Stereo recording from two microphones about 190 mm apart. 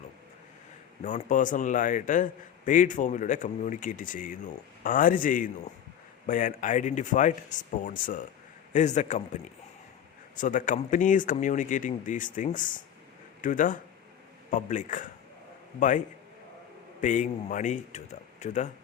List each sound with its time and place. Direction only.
1.0 s a man's voice: 45° left (ahead or behind)